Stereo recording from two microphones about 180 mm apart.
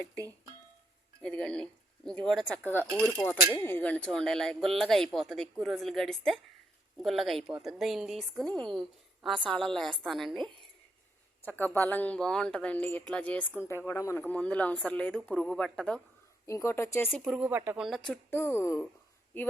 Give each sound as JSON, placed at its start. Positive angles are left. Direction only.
{"t": 1.2, "sound": "a woman's voice", "side_deg": 5}
{"t": 11.4, "sound": "speech", "side_deg": 10}
{"t": 16.5, "sound": "speech", "side_deg": 15}
{"t": 17.1, "sound": "a woman's voice", "side_deg": 5}
{"t": 17.4, "sound": "a woman's voice", "side_deg": -10}
{"t": 18.3, "sound": "speech", "side_deg": 10}